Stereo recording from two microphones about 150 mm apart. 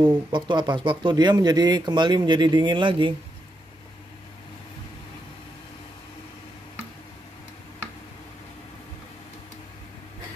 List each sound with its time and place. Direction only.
0.3 s speech: 30° right (ahead or behind)